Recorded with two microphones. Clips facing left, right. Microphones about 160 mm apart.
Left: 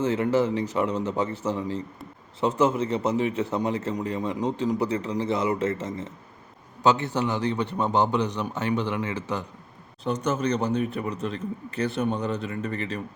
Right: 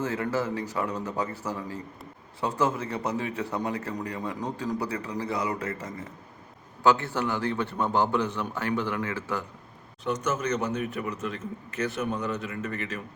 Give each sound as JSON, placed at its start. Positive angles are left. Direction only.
{"t": 0.0, "sound": "a man's voice", "side_deg": 20}
{"t": 10.0, "sound": "a man's voice", "side_deg": 35}